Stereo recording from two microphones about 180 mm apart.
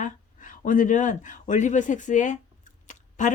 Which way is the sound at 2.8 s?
45° left (ahead or behind).